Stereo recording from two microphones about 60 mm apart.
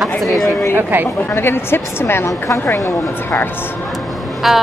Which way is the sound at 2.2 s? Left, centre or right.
Left.